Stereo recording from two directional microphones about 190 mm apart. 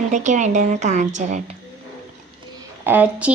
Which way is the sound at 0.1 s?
40° right (ahead or behind).